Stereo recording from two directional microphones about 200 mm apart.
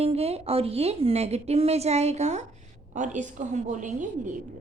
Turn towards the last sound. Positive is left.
turn(degrees=-40)  # may be behind; listen again after turning